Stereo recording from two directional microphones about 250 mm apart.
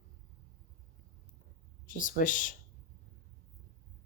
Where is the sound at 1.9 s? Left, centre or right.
Left.